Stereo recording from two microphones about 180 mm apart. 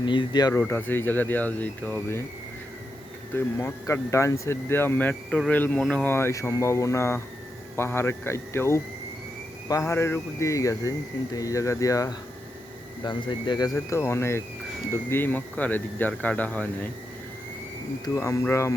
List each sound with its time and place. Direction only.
0.0 s speech: 25° left (ahead or behind)
0.5 s speech: 10° left (ahead or behind)
3.3 s speech: 15° left (ahead or behind)
13.7 s speech: 15° left (ahead or behind)
18.0 s speech: 15° left (ahead or behind)